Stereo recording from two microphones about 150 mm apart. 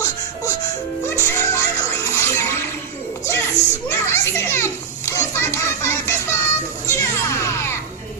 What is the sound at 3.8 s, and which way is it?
A child's voice, 20° left (ahead or behind).